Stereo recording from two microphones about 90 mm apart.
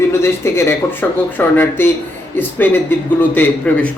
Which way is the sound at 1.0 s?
15° left (ahead or behind).